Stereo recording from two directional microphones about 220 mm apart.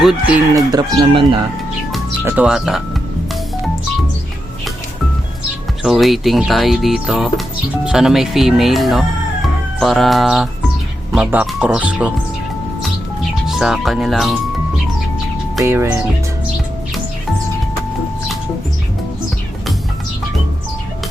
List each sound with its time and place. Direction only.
0.0 s speech: centre (ahead or behind)
0.5 s speech: 20° right (ahead or behind)
2.2 s speech: 5° right (ahead or behind)
5.8 s speech: centre (ahead or behind)
13.5 s speech: centre (ahead or behind)
15.6 s speech: 10° right (ahead or behind)